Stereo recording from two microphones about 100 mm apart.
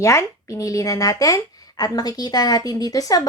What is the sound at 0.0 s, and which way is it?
Speech, 30° left (ahead or behind).